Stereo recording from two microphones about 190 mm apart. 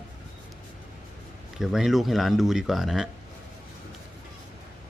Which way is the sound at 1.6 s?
Centre (ahead or behind).